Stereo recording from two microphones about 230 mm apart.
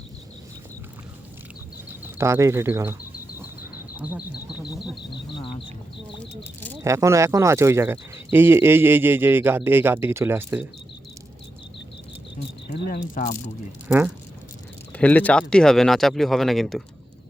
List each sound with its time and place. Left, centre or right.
2.0 s speech: centre
5.1 s speech: left
6.4 s speech: centre
6.8 s speech: centre
12.6 s speech: left
13.8 s speech: centre
14.9 s speech: centre